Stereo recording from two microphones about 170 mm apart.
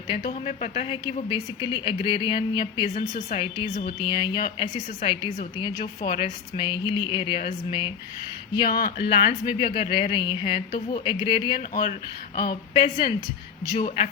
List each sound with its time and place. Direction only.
0.3 s a woman's voice: 40° left (ahead or behind)
2.9 s a woman's voice: 40° left (ahead or behind)
8.7 s speech: 65° left (ahead or behind)
9.0 s a woman's voice: 35° left (ahead or behind)
12.7 s a woman's voice: 30° left (ahead or behind)